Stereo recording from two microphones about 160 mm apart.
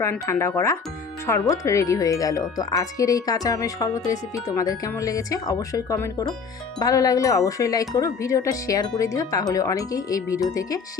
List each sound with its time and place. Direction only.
0.0 s speech: 15° left (ahead or behind)